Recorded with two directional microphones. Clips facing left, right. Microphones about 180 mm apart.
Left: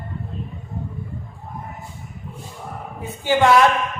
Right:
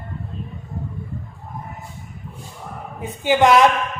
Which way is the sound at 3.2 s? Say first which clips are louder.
Right 1 dB; 15° right (ahead or behind).